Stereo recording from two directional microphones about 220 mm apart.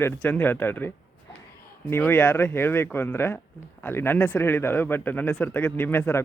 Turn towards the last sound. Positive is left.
turn(degrees=10)  # may be behind; listen again after turning